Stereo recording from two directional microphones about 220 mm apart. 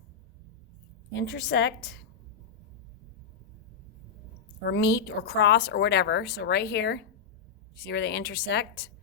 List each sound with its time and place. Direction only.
1.1 s speech: 50° left (ahead or behind)
4.6 s speech: 50° left (ahead or behind)